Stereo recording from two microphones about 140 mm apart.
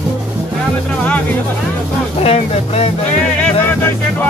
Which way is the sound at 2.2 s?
45° left (ahead or behind).